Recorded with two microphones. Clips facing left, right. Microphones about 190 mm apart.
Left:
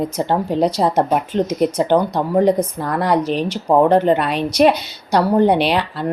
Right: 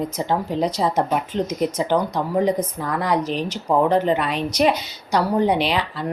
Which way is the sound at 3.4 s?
30° left (ahead or behind).